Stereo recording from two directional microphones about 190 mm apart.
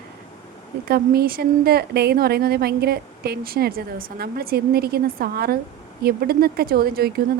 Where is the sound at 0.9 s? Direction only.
55° right (ahead or behind).